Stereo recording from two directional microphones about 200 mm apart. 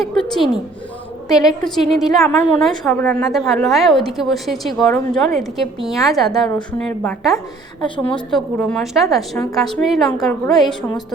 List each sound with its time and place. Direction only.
0.0 s a woman's voice: centre (ahead or behind)
1.3 s a woman's voice: 20° left (ahead or behind)
1.6 s a woman's voice: centre (ahead or behind)